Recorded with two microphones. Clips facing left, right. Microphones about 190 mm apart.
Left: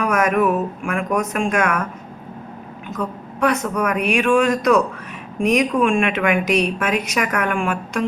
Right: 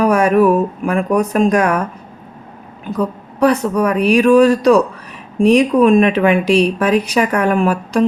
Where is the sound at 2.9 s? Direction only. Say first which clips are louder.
Right 7 dB; 35° right (ahead or behind).